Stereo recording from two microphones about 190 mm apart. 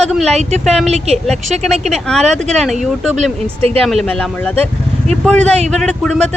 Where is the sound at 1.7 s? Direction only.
35° right (ahead or behind).